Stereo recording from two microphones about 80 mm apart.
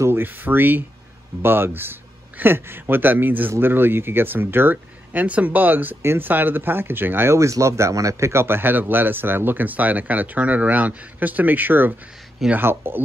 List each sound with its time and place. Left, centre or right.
0.0 s speech: right
7.3 s speech: right